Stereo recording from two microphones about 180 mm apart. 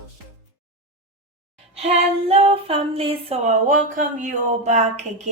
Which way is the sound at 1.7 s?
35° right (ahead or behind).